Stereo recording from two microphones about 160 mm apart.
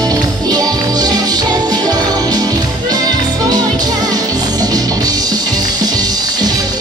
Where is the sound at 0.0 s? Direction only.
25° right (ahead or behind).